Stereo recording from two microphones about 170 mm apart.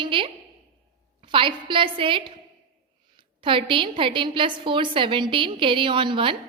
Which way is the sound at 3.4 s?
30° right (ahead or behind).